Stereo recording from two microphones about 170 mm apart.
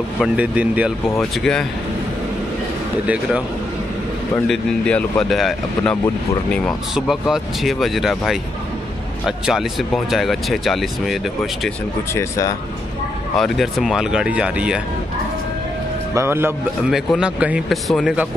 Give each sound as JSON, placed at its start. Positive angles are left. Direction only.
{"t": 0.2, "sound": "speech", "side_deg": -10}
{"t": 4.5, "sound": "speech", "side_deg": 5}
{"t": 12.1, "sound": "speech", "side_deg": 15}
{"t": 13.4, "sound": "speech", "side_deg": 0}
{"t": 16.2, "sound": "speech", "side_deg": -15}